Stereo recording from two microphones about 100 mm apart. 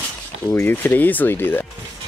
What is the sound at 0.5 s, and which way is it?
Speech, 20° left (ahead or behind).